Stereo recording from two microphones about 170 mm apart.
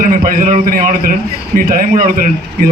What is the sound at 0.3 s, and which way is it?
Speech, 45° right (ahead or behind).